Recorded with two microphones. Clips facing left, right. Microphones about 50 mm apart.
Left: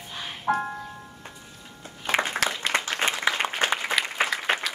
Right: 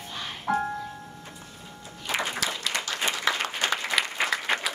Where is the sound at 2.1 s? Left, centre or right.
Left.